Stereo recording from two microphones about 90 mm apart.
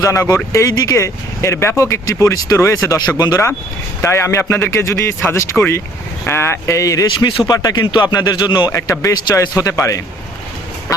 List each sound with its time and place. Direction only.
0.0 s speech: 40° left (ahead or behind)
4.0 s speech: 30° left (ahead or behind); by 8.6 s 55° left (ahead or behind)
8.9 s speech: 40° left (ahead or behind)